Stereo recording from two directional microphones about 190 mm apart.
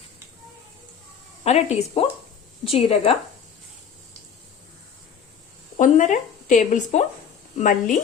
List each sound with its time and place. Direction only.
1.5 s speech: 35° left (ahead or behind)
5.7 s speech: 40° left (ahead or behind)